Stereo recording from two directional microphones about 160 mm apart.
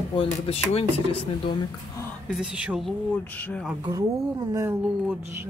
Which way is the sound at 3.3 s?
10° left (ahead or behind).